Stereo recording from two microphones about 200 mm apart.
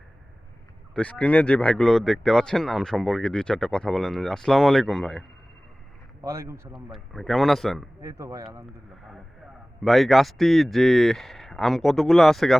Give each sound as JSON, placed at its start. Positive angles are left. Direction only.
{"t": 0.9, "sound": "speech", "side_deg": 5}
{"t": 6.2, "sound": "speech", "side_deg": -15}
{"t": 6.7, "sound": "speech", "side_deg": 0}
{"t": 8.0, "sound": "speech", "side_deg": -15}
{"t": 9.8, "sound": "speech", "side_deg": 0}